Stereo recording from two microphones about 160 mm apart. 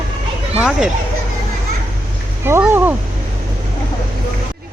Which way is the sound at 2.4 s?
15° right (ahead or behind).